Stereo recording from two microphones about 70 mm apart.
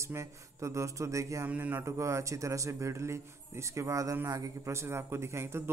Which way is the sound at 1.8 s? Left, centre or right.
Right.